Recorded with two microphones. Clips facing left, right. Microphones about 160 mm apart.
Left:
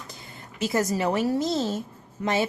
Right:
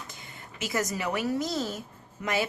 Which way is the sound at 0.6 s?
30° left (ahead or behind).